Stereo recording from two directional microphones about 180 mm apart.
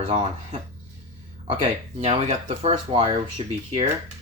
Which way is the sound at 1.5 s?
35° right (ahead or behind).